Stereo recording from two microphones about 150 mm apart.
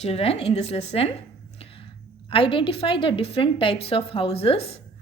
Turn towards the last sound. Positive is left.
turn(degrees=40)  # may be behind; listen again after turning